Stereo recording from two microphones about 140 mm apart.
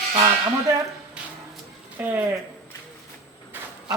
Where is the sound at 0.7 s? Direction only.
25° right (ahead or behind).